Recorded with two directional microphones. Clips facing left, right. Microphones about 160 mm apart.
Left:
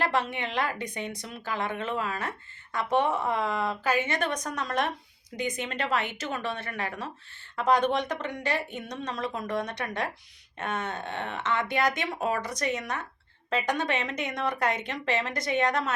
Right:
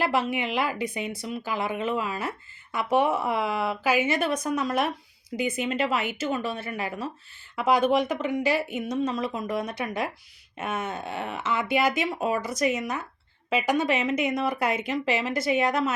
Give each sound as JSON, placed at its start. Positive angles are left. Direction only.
{"t": 0.0, "sound": "a woman's voice", "side_deg": -5}